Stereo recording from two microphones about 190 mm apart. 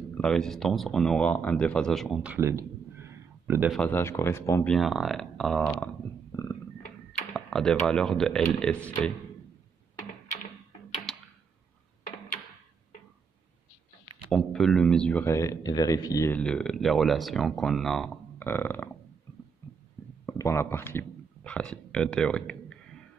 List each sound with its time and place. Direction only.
0.2 s speech: 5° left (ahead or behind)
3.7 s speech: 10° left (ahead or behind)
4.6 s speech: centre (ahead or behind)
6.3 s a sound: 15° left (ahead or behind)
7.3 s speech: 5° left (ahead or behind)
14.3 s speech: 5° left (ahead or behind)
16.3 s speech: 5° left (ahead or behind)
19.6 s a sound: 15° left (ahead or behind)
20.2 s speech: 15° left (ahead or behind)